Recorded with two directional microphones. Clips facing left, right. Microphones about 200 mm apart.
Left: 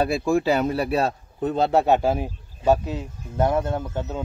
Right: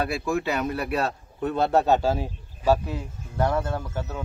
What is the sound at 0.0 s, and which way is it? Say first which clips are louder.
Speech: left 5 dB; 30° left (ahead or behind).